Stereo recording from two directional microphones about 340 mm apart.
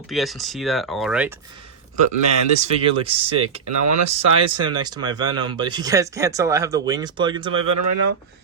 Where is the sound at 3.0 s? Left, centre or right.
Centre.